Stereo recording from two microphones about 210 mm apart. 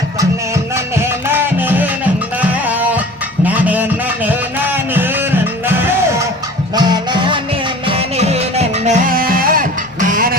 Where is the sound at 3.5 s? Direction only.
5° right (ahead or behind).